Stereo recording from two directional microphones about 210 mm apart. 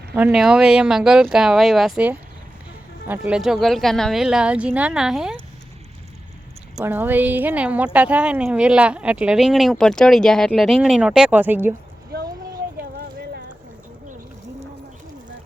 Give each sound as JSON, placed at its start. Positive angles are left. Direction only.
{"t": 0.1, "sound": "speech", "side_deg": -5}
{"t": 6.7, "sound": "a woman's voice", "side_deg": -10}
{"t": 13.0, "sound": "clip-clop", "side_deg": -50}